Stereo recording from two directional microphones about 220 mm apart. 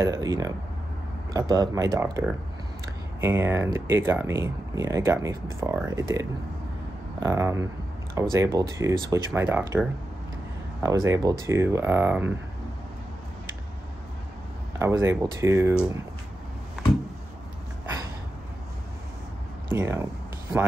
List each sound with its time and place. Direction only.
0.0 s speech: 15° right (ahead or behind)
7.2 s speech: 10° right (ahead or behind)
14.8 s speech: 10° right (ahead or behind)
19.7 s speech: 10° right (ahead or behind)